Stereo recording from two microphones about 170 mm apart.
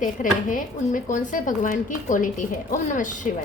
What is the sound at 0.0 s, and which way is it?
Speech, 50° left (ahead or behind).